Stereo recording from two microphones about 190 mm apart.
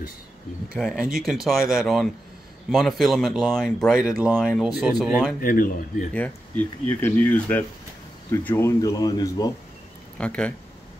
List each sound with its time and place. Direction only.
0.7 s speech: centre (ahead or behind)
5.4 s speech: 45° left (ahead or behind)
6.1 s speech: 10° left (ahead or behind)
10.1 s speech: 5° left (ahead or behind)